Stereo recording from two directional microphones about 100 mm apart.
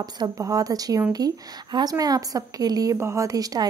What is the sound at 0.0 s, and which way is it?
A woman's voice, 40° right (ahead or behind).